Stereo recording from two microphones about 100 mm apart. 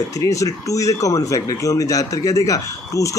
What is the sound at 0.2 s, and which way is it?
Speech, 35° left (ahead or behind).